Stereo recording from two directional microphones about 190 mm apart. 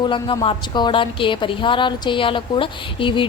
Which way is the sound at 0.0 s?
25° left (ahead or behind).